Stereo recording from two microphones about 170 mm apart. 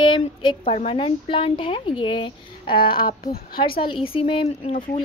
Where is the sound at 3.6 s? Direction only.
30° left (ahead or behind).